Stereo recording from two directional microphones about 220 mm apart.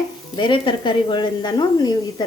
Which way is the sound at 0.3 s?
20° left (ahead or behind).